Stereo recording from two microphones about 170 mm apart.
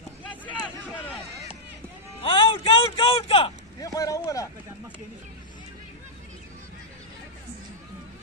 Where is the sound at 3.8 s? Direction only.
20° left (ahead or behind).